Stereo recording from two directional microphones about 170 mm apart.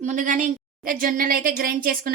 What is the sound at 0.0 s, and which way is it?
A woman's voice, 50° right (ahead or behind).